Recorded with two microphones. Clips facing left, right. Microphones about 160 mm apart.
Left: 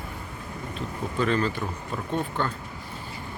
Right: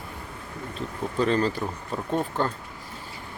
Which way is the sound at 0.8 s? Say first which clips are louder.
Right 2 dB; 35° right (ahead or behind).